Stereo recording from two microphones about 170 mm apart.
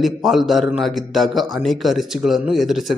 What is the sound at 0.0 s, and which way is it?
A man's voice, centre (ahead or behind).